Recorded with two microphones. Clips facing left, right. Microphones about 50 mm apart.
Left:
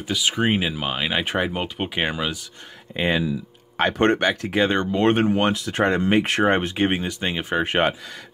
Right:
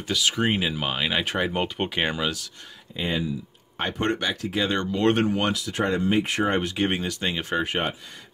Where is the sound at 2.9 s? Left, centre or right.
Left.